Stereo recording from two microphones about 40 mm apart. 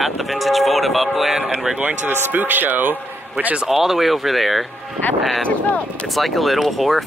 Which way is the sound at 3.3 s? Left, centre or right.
Right.